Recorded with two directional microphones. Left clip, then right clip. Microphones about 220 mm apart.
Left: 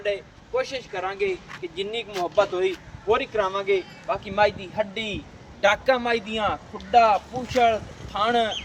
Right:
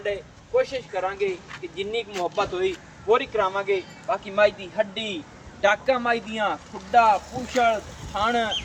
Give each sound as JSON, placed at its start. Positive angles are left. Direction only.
{"t": 0.0, "sound": "speech", "side_deg": 35}